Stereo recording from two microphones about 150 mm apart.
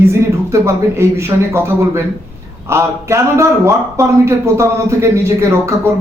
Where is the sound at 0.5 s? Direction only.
20° right (ahead or behind).